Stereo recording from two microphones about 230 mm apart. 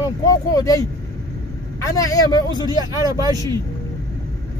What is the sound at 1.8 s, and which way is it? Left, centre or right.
A man's voice, centre.